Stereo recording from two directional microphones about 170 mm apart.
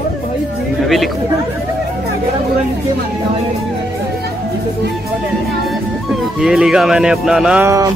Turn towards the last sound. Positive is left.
turn(degrees=-20)  # may be behind; listen again after turning